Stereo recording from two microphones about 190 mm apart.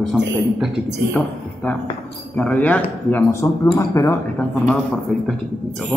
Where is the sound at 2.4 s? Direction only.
5° left (ahead or behind).